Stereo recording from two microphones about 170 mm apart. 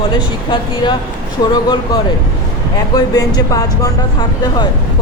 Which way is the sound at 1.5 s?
25° left (ahead or behind).